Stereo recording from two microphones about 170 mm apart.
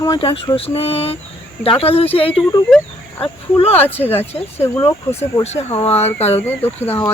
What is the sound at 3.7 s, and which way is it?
Speech, 10° left (ahead or behind).